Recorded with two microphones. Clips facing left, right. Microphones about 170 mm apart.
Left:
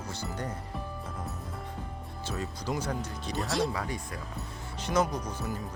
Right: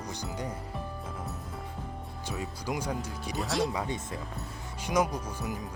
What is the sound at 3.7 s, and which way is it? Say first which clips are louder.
Speech: right 2 dB; 25° right (ahead or behind).